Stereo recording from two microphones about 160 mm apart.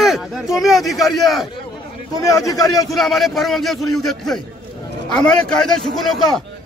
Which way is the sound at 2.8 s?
Centre (ahead or behind).